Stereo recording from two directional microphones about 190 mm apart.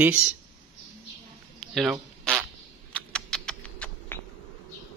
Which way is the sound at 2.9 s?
5° left (ahead or behind).